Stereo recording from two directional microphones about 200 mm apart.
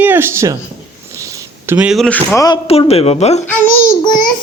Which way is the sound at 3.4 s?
10° left (ahead or behind).